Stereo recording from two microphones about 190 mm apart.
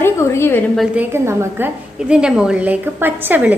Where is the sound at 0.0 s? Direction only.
15° left (ahead or behind).